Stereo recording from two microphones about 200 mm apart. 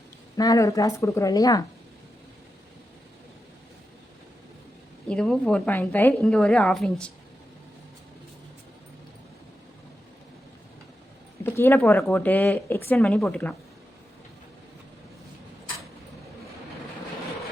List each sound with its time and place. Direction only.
0.3 s speech: 20° left (ahead or behind)
5.0 s a woman's voice: 5° left (ahead or behind)
11.4 s speech: 10° left (ahead or behind)